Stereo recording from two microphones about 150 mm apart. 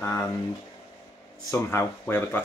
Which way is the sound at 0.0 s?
15° left (ahead or behind).